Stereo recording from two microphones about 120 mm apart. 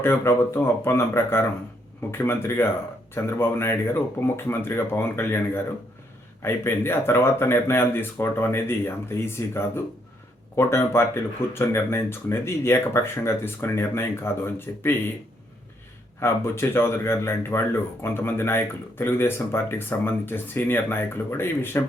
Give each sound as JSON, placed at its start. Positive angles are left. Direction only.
{"t": 0.0, "sound": "speech", "side_deg": 20}
{"t": 16.2, "sound": "speech", "side_deg": 20}